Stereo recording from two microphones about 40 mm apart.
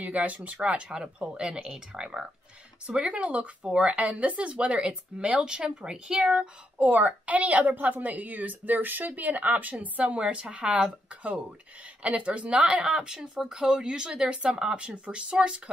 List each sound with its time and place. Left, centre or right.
0.0 s a woman's voice: right; by 2.0 s centre
3.0 s a woman's voice: right
6.8 s a woman's voice: right
12.8 s speech: centre
15.0 s speech: right